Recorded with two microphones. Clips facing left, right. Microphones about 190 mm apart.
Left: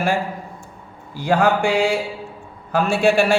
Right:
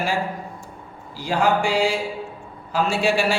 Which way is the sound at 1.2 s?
55° left (ahead or behind).